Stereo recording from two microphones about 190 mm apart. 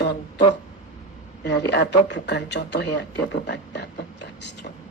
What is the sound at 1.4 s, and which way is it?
Speech, 65° left (ahead or behind).